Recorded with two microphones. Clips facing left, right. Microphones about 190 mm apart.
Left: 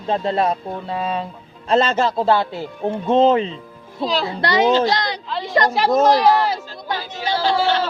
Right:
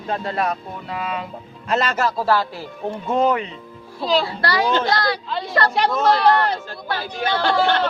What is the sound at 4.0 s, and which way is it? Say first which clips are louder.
Speech: right 2 dB; centre (ahead or behind).